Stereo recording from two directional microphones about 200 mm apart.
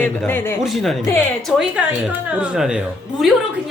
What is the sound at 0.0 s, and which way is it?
Speech, 10° left (ahead or behind).